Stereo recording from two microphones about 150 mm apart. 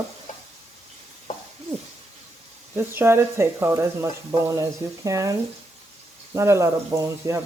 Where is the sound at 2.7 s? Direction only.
15° right (ahead or behind).